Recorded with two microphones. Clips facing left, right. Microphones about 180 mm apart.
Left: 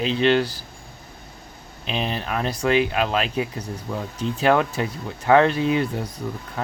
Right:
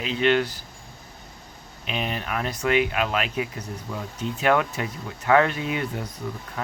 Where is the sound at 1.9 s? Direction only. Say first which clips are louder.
Left 3 dB; 30° left (ahead or behind).